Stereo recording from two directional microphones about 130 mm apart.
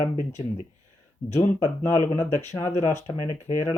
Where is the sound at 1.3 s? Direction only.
20° left (ahead or behind).